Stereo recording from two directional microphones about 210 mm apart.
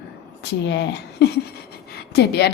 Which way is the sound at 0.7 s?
55° left (ahead or behind).